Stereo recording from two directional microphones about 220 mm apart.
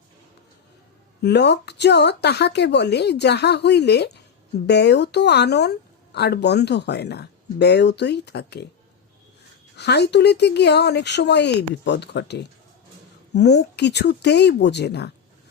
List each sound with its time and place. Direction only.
1.2 s speech: 50° left (ahead or behind)
9.7 s speech: 50° left (ahead or behind)